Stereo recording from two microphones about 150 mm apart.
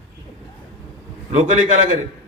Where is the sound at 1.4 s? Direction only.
55° right (ahead or behind).